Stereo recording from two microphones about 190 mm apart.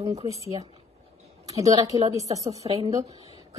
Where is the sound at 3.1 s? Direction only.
35° left (ahead or behind).